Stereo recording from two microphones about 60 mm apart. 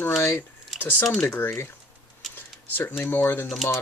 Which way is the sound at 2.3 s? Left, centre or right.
Left.